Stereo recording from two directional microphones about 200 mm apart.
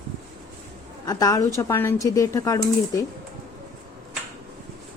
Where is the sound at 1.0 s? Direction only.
20° left (ahead or behind).